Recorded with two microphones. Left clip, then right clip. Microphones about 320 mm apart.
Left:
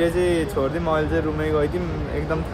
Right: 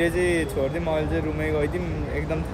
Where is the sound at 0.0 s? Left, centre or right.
Centre.